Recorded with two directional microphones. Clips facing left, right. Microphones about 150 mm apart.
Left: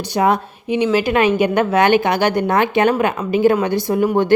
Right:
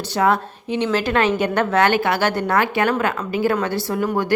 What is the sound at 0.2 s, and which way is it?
A woman's voice, 15° left (ahead or behind).